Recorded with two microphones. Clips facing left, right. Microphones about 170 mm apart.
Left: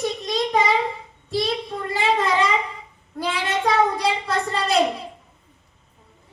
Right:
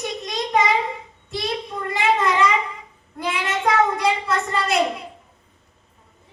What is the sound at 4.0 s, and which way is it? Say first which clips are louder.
Speech: right 1 dB; 30° left (ahead or behind).